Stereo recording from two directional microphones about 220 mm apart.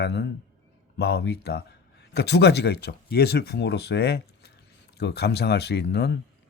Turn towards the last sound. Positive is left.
turn(degrees=50)  # may be behind; listen again after turning